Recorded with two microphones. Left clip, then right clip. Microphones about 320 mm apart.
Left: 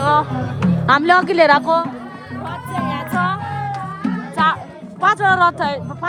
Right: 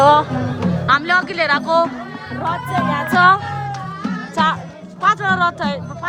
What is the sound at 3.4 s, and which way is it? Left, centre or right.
Music, left.